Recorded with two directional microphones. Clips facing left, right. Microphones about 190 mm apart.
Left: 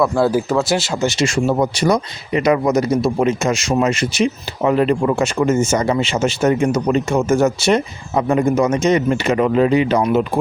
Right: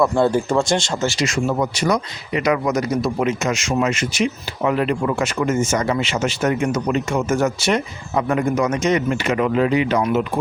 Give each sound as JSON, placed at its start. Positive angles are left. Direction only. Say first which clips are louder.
{"t": 0.0, "sound": "speech", "louder": "left 1 dB", "side_deg": 5}
{"t": 1.0, "sound": "speech", "louder": "left 3 dB", "side_deg": 25}